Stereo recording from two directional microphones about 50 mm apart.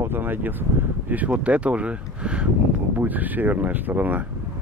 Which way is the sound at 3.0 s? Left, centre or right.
Right.